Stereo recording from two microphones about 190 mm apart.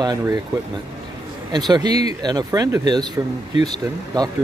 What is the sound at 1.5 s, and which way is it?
Speech, 20° right (ahead or behind).